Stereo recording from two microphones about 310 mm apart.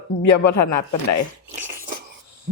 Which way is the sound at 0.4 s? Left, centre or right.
Left.